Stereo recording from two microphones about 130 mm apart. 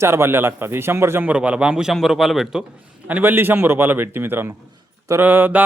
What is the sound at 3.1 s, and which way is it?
A man's voice, 15° right (ahead or behind).